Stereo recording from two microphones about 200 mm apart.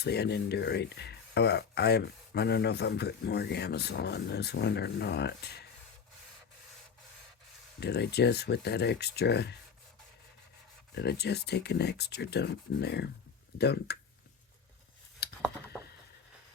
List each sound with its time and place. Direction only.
0.0 s speech: 55° left (ahead or behind)
7.8 s speech: 55° left (ahead or behind)
10.9 s speech: 55° left (ahead or behind)
15.2 s a sound: 50° left (ahead or behind)